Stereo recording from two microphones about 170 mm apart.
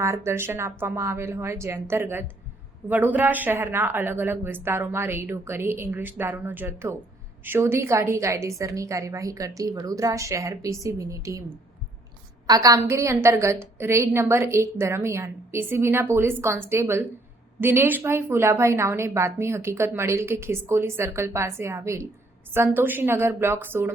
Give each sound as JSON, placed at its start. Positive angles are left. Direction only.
{"t": 0.0, "sound": "a woman's voice", "side_deg": -15}